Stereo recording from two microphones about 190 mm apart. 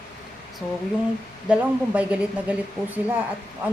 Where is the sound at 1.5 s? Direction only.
5° right (ahead or behind).